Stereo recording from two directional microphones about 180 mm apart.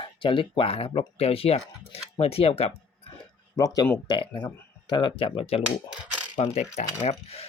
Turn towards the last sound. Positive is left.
turn(degrees=35)  # may be behind; listen again after turning